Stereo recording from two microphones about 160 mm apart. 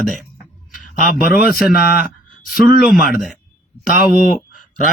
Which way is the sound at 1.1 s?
70° left (ahead or behind).